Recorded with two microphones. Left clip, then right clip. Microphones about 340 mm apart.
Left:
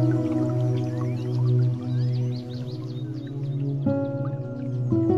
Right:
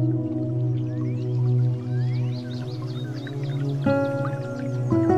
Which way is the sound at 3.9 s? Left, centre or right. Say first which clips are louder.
Right 5 dB; right.